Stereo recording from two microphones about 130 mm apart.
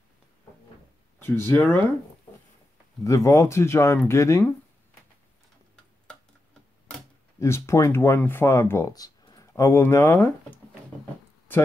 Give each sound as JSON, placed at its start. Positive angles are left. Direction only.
{"t": 1.2, "sound": "speech", "side_deg": 20}
{"t": 3.0, "sound": "speech", "side_deg": 25}
{"t": 7.3, "sound": "speech", "side_deg": 20}